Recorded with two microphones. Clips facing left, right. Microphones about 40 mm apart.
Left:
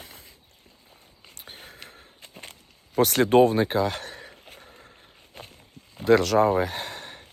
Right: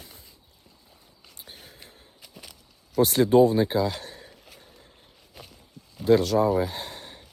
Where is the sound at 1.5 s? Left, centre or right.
Left.